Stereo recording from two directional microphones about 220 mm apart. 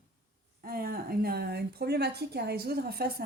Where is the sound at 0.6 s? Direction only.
45° right (ahead or behind).